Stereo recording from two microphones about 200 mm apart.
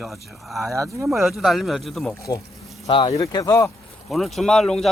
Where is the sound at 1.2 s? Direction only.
Centre (ahead or behind).